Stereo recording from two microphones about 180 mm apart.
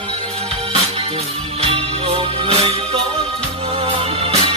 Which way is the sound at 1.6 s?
35° right (ahead or behind).